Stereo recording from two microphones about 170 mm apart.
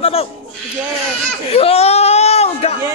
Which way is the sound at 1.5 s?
35° left (ahead or behind).